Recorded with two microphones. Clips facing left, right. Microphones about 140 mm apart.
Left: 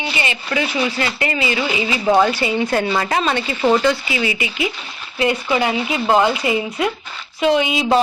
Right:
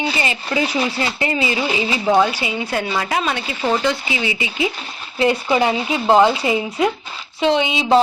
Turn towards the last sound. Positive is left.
turn(degrees=-25)  # may be behind; listen again after turning